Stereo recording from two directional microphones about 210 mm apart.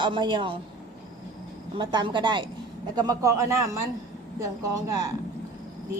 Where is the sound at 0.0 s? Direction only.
20° right (ahead or behind).